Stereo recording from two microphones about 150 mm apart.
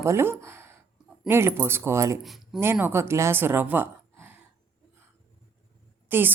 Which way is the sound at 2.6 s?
15° right (ahead or behind).